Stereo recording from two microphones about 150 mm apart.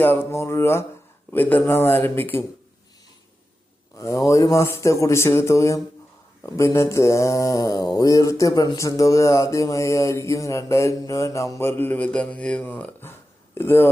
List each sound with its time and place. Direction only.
0.0 s speech: 15° left (ahead or behind)
3.9 s mantra: 20° left (ahead or behind)